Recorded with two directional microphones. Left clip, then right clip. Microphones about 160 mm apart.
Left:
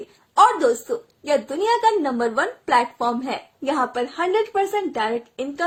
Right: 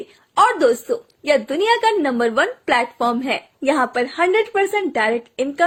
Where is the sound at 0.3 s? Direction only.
30° right (ahead or behind).